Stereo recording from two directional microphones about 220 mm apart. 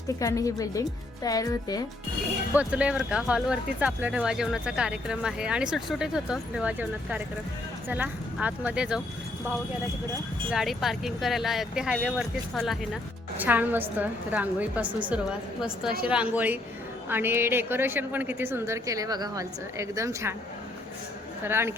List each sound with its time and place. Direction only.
0.2 s speech: 15° left (ahead or behind)
2.5 s a woman's voice: 5° right (ahead or behind)
10.5 s a woman's voice: centre (ahead or behind)
16.0 s a woman's voice: 5° right (ahead or behind)
21.4 s a woman's voice: 10° right (ahead or behind)